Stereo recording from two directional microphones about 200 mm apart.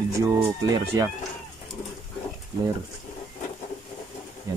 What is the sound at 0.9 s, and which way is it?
Speech, 15° right (ahead or behind).